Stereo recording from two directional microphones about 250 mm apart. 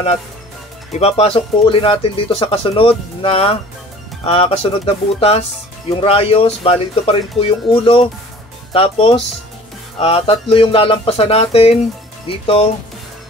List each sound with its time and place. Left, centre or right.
0.9 s speech: left